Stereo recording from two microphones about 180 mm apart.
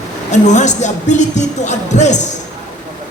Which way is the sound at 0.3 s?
40° left (ahead or behind).